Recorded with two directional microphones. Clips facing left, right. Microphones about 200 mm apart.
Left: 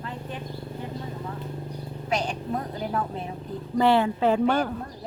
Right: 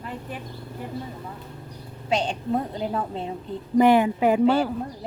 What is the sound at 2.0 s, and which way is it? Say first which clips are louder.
A woman's voice: right 3 dB; 30° right (ahead or behind).